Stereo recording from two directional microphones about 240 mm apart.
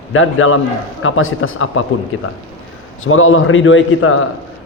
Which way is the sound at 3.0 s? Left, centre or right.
Left.